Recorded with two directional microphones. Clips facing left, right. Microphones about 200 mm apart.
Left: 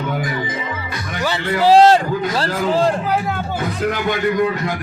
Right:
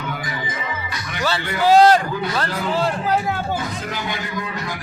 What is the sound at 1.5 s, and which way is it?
Speech, 30° left (ahead or behind).